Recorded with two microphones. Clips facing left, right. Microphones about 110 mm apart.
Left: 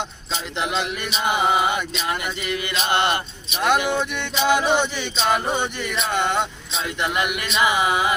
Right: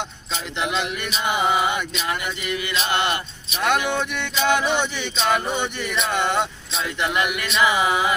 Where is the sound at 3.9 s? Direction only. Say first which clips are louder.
Left 1 dB; 10° left (ahead or behind).